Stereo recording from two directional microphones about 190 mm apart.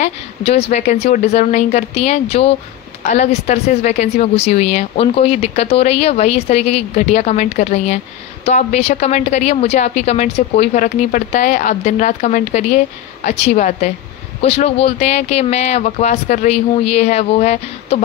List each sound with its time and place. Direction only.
0.0 s a woman's voice: 35° left (ahead or behind)